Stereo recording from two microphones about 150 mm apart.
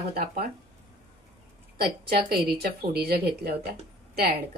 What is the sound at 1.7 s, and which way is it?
A woman's voice, 90° right.